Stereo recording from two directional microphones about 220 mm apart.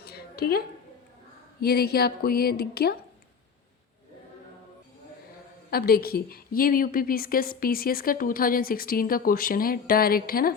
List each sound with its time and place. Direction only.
0.0 s a sound: 45° left (ahead or behind)
1.6 s a woman's voice: 45° left (ahead or behind)
5.7 s a woman's voice: 45° left (ahead or behind)